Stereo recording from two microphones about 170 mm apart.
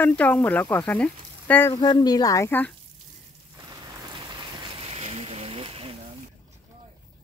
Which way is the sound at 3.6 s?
25° right (ahead or behind).